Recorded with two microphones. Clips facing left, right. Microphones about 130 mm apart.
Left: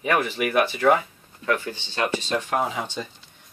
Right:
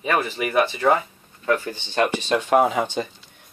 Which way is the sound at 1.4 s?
40° right (ahead or behind).